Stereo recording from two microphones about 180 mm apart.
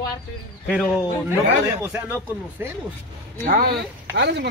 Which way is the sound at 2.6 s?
10° right (ahead or behind).